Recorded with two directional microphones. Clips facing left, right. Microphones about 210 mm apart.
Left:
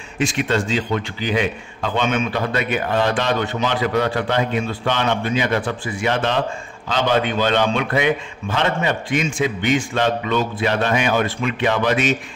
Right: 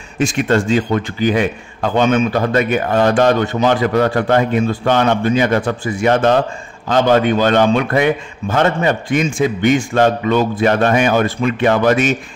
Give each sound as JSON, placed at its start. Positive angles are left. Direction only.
{"t": 0.2, "sound": "a man's voice", "side_deg": -45}